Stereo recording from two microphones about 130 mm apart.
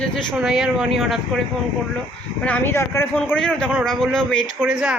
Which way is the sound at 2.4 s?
15° left (ahead or behind).